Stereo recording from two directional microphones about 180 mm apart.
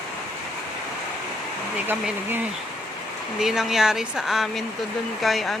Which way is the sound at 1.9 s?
10° right (ahead or behind).